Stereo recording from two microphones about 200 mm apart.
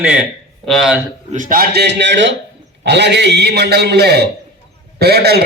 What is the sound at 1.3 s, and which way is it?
A man's voice, 40° right (ahead or behind).